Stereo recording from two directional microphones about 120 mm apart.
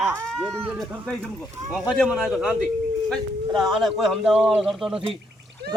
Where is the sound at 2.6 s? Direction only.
5° left (ahead or behind).